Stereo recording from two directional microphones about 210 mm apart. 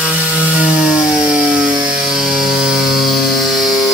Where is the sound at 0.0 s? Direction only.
5° right (ahead or behind).